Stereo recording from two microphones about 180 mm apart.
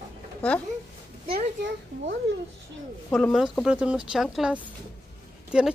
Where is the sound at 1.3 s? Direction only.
90° right.